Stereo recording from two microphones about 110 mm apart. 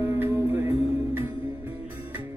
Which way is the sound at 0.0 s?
25° right (ahead or behind).